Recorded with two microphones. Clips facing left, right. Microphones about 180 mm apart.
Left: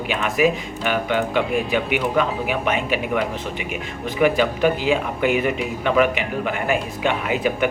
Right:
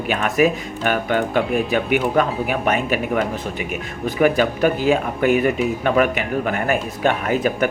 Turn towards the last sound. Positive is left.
turn(degrees=-45)  # may be behind; listen again after turning